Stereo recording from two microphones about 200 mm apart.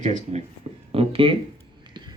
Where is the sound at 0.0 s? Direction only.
35° right (ahead or behind).